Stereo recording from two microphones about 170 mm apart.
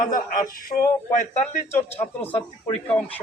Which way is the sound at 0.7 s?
30° left (ahead or behind).